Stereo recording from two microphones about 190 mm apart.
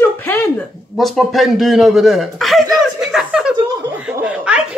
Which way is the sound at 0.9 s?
Centre (ahead or behind).